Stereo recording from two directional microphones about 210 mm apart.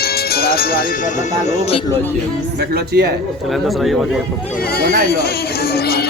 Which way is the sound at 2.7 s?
50° right (ahead or behind).